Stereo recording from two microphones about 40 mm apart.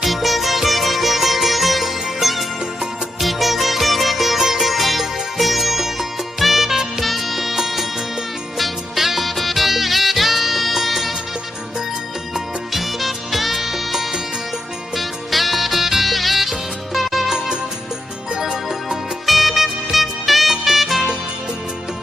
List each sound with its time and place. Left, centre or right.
0.0 s music: centre
12.3 s music: centre
18.3 s music: centre
19.2 s music: centre